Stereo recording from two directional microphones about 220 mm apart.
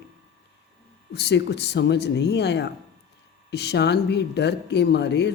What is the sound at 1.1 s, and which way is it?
Speech, 50° left (ahead or behind).